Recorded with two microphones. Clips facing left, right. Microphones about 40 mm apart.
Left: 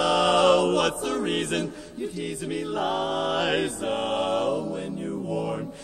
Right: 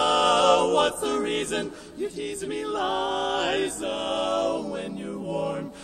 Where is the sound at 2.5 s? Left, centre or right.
Centre.